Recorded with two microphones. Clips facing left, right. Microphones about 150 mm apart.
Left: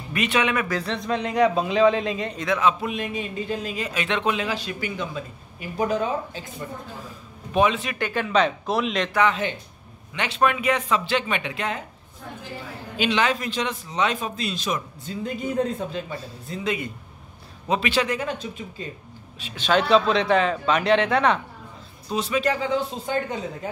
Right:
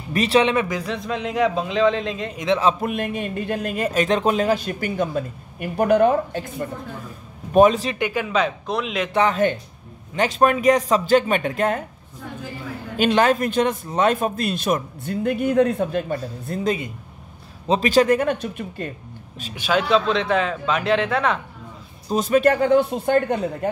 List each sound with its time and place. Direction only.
0.1 s speech: 35° right (ahead or behind)
0.7 s speech: 10° right (ahead or behind)
2.3 s a man's voice: 20° right (ahead or behind)
2.8 s a man's voice: 50° right (ahead or behind)
7.5 s speech: 40° right (ahead or behind)
8.1 s speech: 5° right (ahead or behind)
9.3 s a man's voice: 50° right (ahead or behind)
12.9 s a man's voice: 45° right (ahead or behind)
19.5 s speech: 5° right (ahead or behind)
22.1 s speech: 50° right (ahead or behind)